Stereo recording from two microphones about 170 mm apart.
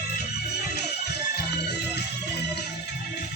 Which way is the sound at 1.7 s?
80° left.